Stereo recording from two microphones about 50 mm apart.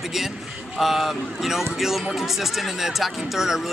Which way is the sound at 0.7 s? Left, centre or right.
Centre.